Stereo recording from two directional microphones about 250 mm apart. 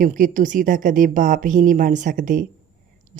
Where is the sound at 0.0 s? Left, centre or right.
Right.